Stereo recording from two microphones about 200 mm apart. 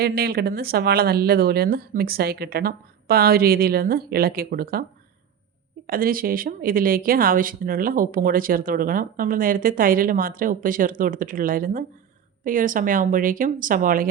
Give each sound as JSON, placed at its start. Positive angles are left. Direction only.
{"t": 0.0, "sound": "speech", "side_deg": -50}
{"t": 5.9, "sound": "speech", "side_deg": -45}